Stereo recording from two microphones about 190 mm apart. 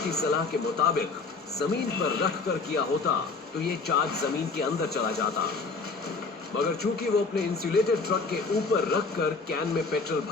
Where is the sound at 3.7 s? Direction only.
55° left (ahead or behind).